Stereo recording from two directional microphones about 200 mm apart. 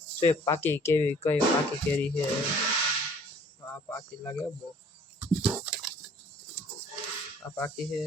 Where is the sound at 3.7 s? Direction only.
10° left (ahead or behind).